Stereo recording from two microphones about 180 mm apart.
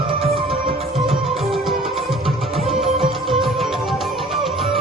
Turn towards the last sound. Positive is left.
turn(degrees=0)  # may be behind; listen again after turning